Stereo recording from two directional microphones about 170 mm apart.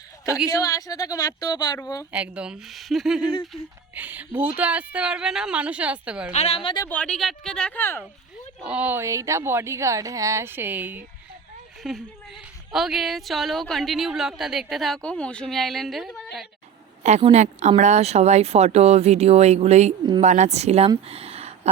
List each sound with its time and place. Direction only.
0.4 s a woman's voice: 20° left (ahead or behind)
2.1 s a woman's voice: 5° right (ahead or behind)
6.3 s speech: 35° left (ahead or behind)
6.8 s a woman's voice: 5° left (ahead or behind)
8.6 s a woman's voice: 10° right (ahead or behind)
17.0 s a woman's voice: 40° right (ahead or behind)
21.1 s a sound: 35° right (ahead or behind)